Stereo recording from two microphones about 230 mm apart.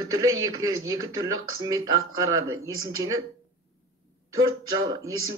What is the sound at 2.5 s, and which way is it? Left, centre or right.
Speech, right.